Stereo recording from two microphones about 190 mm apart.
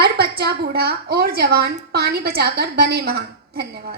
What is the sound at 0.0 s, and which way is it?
A woman's voice, 55° right (ahead or behind).